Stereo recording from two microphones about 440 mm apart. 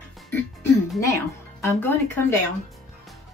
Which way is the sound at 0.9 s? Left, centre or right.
Centre.